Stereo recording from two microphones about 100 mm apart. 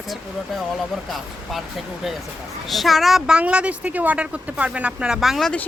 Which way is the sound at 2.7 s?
Centre (ahead or behind).